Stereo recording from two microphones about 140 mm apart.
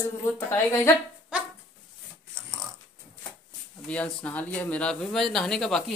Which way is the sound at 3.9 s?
10° left (ahead or behind).